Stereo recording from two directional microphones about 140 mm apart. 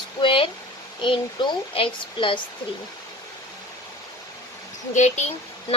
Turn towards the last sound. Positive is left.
turn(degrees=55)  # may be behind; listen again after turning